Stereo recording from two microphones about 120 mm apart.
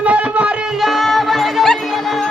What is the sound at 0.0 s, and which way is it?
Music, 10° right (ahead or behind).